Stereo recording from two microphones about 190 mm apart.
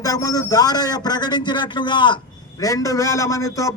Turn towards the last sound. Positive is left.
turn(degrees=15)  # may be behind; listen again after turning